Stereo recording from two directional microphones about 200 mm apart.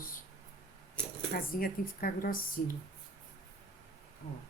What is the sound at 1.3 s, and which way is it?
Speech, 45° left (ahead or behind).